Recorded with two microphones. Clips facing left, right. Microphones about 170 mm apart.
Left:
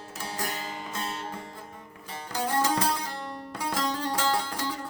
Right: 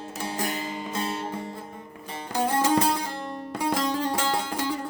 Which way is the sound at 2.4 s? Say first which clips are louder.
Right 4 dB; 25° right (ahead or behind).